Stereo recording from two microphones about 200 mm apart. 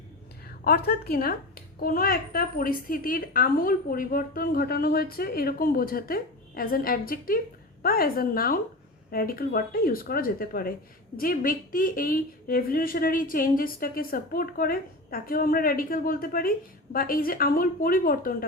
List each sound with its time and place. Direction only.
0.4 s a woman's voice: 50° left (ahead or behind)